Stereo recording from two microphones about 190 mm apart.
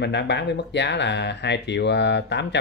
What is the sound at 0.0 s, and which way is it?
Speech, 65° left (ahead or behind).